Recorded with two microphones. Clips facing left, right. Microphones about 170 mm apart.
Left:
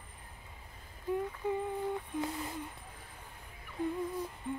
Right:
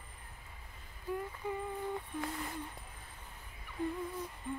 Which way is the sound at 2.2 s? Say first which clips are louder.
Left 2 dB; 20° left (ahead or behind).